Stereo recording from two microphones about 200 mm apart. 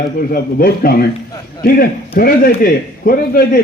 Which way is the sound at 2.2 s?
45° left (ahead or behind).